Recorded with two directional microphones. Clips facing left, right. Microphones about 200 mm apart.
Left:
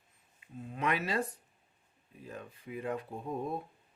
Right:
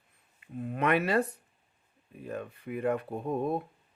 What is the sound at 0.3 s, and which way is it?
Speech, 60° right (ahead or behind).